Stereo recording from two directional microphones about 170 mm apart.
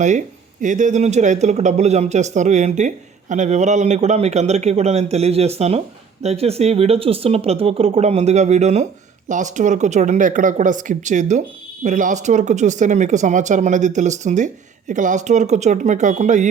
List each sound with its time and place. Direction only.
0.0 s speech: 45° right (ahead or behind)